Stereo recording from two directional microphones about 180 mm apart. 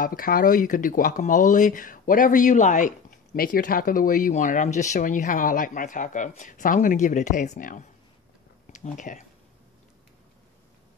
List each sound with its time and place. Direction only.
0.0 s speech: 50° left (ahead or behind)